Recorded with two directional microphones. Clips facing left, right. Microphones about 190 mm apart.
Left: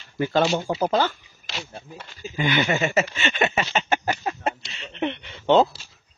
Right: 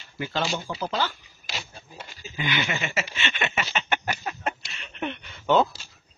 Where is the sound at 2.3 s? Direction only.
45° left (ahead or behind); by 5.7 s 25° left (ahead or behind).